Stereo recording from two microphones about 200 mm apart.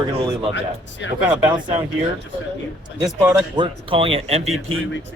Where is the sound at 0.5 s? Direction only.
60° left (ahead or behind).